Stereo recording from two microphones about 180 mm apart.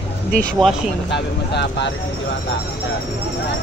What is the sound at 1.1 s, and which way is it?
Speech, 70° left (ahead or behind).